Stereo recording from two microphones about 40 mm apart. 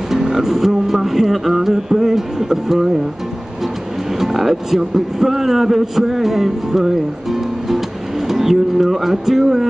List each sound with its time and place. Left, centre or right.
0.1 s a man's voice: centre
4.2 s a man's voice: centre
8.3 s music: centre